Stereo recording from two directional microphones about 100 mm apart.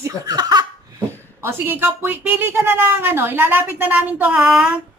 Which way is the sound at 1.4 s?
25° right (ahead or behind).